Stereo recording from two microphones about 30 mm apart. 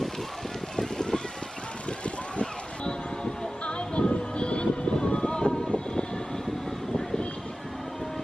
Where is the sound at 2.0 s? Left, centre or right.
Left.